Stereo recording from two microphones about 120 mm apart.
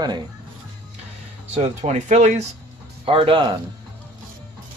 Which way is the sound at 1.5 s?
75° right (ahead or behind).